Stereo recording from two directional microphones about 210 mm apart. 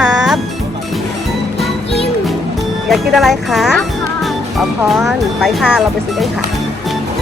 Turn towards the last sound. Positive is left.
turn(degrees=-5)  # may be behind; listen again after turning